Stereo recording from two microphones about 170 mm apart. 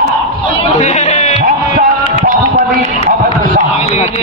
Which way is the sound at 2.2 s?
50° right (ahead or behind).